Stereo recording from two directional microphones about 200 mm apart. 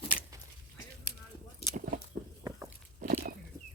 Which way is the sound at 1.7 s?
40° right (ahead or behind).